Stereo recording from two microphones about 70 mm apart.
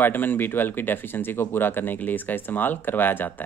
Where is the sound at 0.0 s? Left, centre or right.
Left.